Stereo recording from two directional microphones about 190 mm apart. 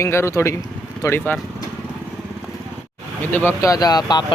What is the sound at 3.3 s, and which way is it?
Speech, 15° left (ahead or behind).